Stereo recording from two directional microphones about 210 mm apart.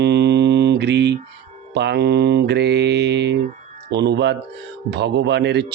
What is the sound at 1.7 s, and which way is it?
Speech, 50° right (ahead or behind).